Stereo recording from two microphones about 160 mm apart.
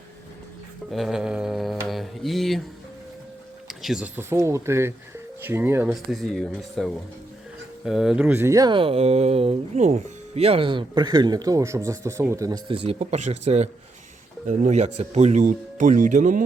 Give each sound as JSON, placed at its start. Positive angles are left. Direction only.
{"t": 0.9, "sound": "mantra", "side_deg": 0}
{"t": 3.7, "sound": "speech", "side_deg": -5}
{"t": 5.9, "sound": "speech", "side_deg": 0}